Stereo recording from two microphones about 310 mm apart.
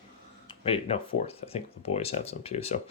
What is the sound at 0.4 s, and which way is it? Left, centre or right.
Speech, centre.